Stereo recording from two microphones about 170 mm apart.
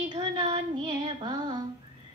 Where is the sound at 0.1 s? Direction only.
25° right (ahead or behind).